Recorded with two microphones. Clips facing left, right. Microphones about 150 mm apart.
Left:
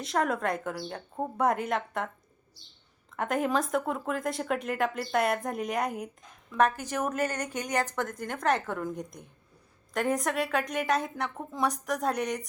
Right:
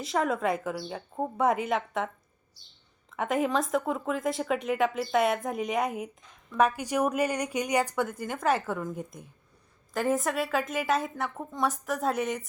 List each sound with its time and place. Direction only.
0.0 s speech: centre (ahead or behind)
3.2 s speech: centre (ahead or behind)